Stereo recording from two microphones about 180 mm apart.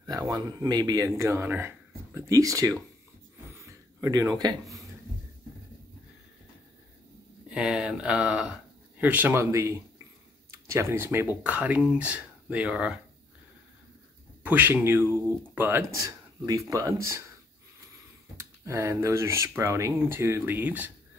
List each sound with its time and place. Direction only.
0.0 s speech: 20° right (ahead or behind)
3.6 s a sound: 20° right (ahead or behind)
7.4 s speech: 5° right (ahead or behind)
14.4 s speech: 10° right (ahead or behind)
18.4 s speech: 15° right (ahead or behind)